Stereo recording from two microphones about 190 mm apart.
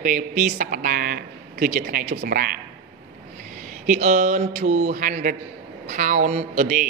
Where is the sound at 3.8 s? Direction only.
40° right (ahead or behind).